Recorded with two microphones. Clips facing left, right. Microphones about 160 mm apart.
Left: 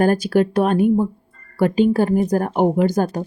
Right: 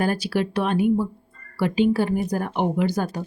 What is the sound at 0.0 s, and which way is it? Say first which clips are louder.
Speech: left 7 dB; 45° left (ahead or behind).